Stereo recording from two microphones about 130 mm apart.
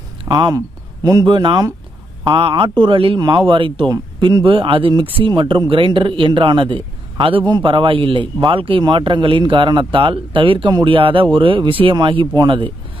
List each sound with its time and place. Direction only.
0.3 s a man's voice: 30° right (ahead or behind)